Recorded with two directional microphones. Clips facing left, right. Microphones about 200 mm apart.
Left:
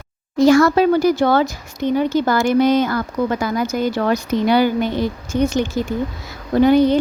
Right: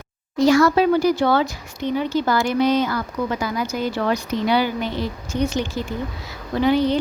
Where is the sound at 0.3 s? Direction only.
50° left (ahead or behind).